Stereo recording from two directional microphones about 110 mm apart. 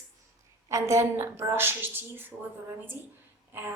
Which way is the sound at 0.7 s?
25° right (ahead or behind).